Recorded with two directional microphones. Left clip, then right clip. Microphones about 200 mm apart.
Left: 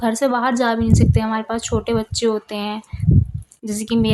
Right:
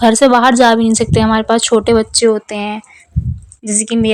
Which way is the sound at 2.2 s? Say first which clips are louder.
Right 7 dB; 25° right (ahead or behind).